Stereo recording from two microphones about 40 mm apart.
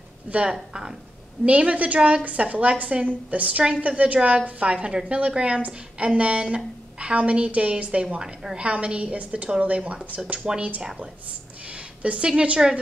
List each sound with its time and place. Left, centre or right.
0.5 s speech: centre
1.4 s a woman's voice: right
12.0 s speech: right